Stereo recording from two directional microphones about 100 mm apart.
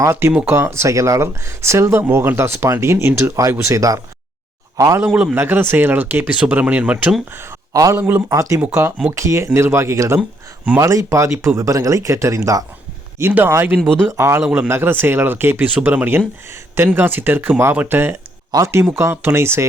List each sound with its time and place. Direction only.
0.0 s speech: 25° right (ahead or behind)
5.0 s speech: 10° right (ahead or behind)
5.3 s speech: 20° right (ahead or behind)
7.7 s a man's voice: 35° right (ahead or behind)
7.9 s speech: 25° right (ahead or behind)
13.7 s speech: 5° left (ahead or behind)
14.1 s speech: 30° right (ahead or behind)